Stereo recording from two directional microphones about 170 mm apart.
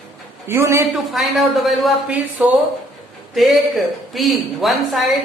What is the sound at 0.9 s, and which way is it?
A woman's voice, centre (ahead or behind).